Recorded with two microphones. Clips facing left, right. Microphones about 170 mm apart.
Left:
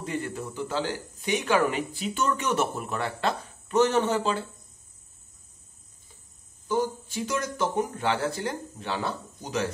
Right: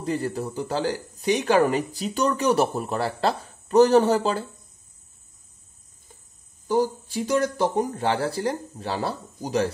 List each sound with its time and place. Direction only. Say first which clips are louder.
0.0 s speech: right 5 dB; 35° right (ahead or behind)
6.7 s speech: right 4 dB; 35° right (ahead or behind)